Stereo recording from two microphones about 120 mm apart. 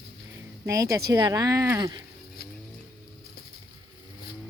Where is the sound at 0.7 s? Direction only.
25° right (ahead or behind).